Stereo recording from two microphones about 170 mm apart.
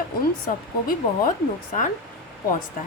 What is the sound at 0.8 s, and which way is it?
Speech, 55° left (ahead or behind).